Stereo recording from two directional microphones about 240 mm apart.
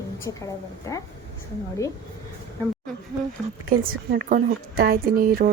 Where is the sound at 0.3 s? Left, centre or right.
Centre.